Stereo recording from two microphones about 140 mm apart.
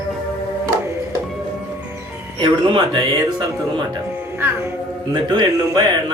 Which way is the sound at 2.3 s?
35° right (ahead or behind).